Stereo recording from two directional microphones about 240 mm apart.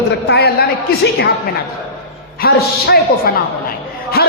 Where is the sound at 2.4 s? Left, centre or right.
Left.